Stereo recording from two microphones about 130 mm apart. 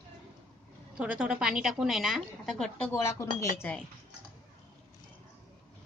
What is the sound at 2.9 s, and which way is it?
Speech, 20° left (ahead or behind).